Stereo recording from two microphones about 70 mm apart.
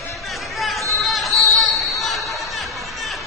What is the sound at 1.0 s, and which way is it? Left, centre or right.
Music, centre.